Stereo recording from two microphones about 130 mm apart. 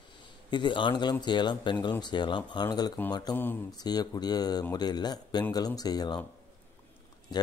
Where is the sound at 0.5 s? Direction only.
35° left (ahead or behind).